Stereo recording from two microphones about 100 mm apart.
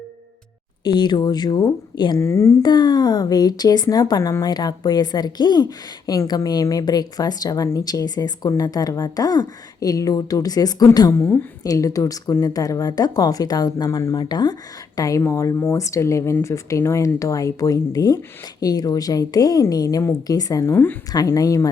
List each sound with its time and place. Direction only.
0.9 s speech: 50° left (ahead or behind)
2.2 s speech: 30° left (ahead or behind)
2.6 s a woman's voice: 45° left (ahead or behind)
11.1 s a woman's voice: 25° left (ahead or behind); by 14.5 s 45° left (ahead or behind)
14.9 s a woman's voice: 35° left (ahead or behind)